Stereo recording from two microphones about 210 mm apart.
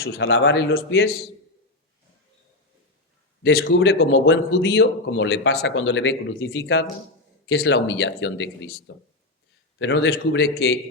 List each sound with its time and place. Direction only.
0.0 s speech: 65° left (ahead or behind); by 1.1 s 50° left (ahead or behind)
3.4 s speech: 55° left (ahead or behind)